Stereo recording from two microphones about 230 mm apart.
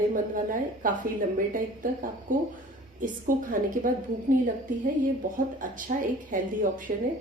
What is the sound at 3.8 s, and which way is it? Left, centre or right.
Speech, right.